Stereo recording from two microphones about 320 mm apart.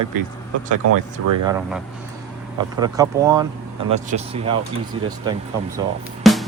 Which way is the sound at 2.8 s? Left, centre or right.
Centre.